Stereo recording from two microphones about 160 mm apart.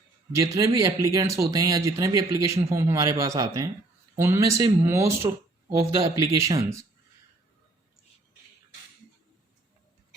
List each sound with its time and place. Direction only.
0.3 s speech: 20° right (ahead or behind)